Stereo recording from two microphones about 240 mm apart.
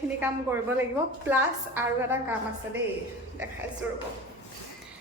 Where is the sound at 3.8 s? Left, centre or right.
Centre.